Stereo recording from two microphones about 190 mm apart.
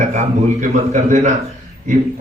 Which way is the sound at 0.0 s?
40° right (ahead or behind).